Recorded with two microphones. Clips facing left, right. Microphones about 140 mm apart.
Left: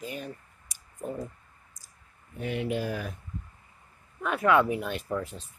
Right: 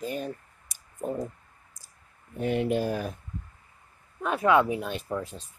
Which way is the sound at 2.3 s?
45° right (ahead or behind).